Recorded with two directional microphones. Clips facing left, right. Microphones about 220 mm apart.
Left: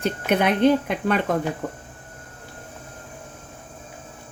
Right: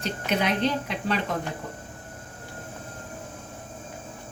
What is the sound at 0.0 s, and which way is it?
Speech, 55° left (ahead or behind).